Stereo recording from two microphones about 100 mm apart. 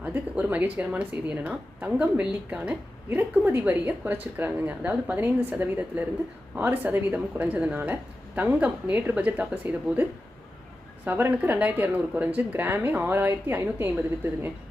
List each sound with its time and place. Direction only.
0.0 s speech: 15° right (ahead or behind)